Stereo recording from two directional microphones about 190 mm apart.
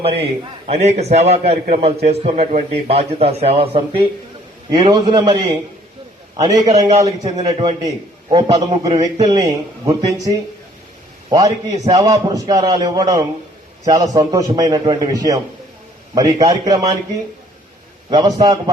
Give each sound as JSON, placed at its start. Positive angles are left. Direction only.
{"t": 0.7, "sound": "a man's voice", "side_deg": -35}
{"t": 11.3, "sound": "a man's voice", "side_deg": -20}
{"t": 18.1, "sound": "a man's voice", "side_deg": -20}